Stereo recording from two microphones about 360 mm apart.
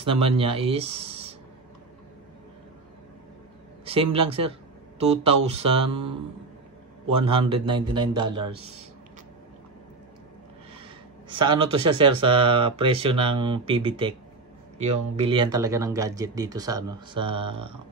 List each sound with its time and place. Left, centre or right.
0.0 s speech: centre
3.8 s speech: centre
11.2 s speech: centre